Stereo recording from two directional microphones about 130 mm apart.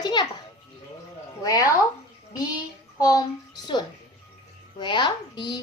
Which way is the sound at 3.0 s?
30° left (ahead or behind).